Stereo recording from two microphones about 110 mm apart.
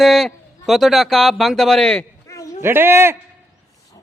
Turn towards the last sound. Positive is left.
turn(degrees=-20)  # may be behind; listen again after turning